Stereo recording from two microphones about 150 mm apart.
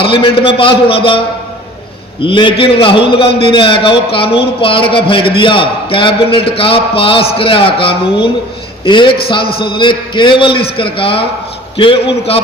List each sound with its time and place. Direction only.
0.0 s a man's voice: 35° left (ahead or behind)
2.2 s a man's voice: 35° left (ahead or behind)